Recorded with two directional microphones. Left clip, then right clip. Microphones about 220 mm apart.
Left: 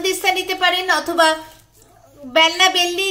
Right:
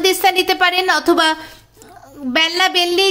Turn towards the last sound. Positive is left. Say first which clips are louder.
# right 1 dB
turn(degrees=-45)  # may be behind; listen again after turning